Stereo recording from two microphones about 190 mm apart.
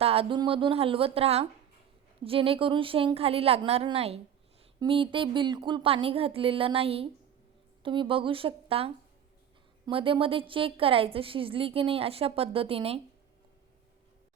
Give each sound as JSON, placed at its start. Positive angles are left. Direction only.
{"t": 0.0, "sound": "a woman's voice", "side_deg": -30}